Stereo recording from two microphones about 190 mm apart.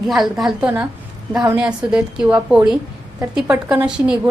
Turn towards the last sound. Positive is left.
turn(degrees=-5)  # may be behind; listen again after turning